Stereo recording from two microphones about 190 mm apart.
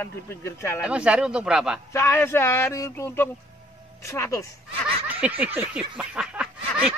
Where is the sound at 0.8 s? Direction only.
5° right (ahead or behind).